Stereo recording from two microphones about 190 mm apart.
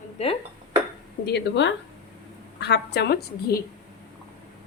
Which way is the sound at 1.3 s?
65° left (ahead or behind).